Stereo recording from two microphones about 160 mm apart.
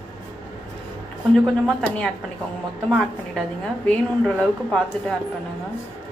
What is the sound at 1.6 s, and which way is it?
Speech, 5° left (ahead or behind).